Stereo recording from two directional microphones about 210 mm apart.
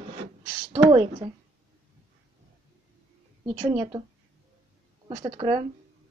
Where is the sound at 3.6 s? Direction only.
20° right (ahead or behind).